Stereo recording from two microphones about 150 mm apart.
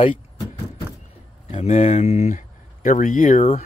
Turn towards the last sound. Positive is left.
turn(degrees=55)  # may be behind; listen again after turning